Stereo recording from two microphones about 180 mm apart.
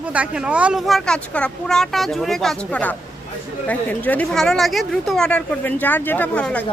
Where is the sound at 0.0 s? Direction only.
5° right (ahead or behind).